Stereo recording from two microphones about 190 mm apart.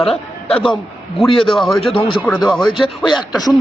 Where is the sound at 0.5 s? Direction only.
Centre (ahead or behind).